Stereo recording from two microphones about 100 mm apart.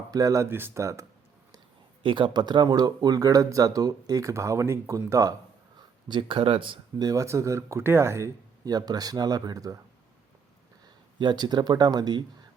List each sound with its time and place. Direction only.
0.1 s speech: 35° right (ahead or behind)
0.4 s speech: 25° right (ahead or behind)
2.0 s speech: 55° right (ahead or behind); by 5.3 s 30° right (ahead or behind)
6.1 s speech: 55° right (ahead or behind)
7.0 s speech: 30° right (ahead or behind)
8.6 s speech: 40° right (ahead or behind)
11.2 s speech: 45° right (ahead or behind)